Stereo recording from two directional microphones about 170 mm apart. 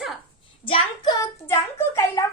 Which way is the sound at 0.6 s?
25° left (ahead or behind).